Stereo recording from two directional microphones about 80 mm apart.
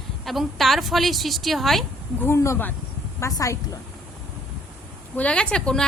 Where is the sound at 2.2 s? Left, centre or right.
Left.